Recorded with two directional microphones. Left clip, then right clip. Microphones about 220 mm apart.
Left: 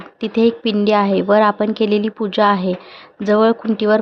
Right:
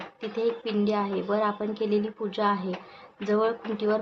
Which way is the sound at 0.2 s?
40° left (ahead or behind).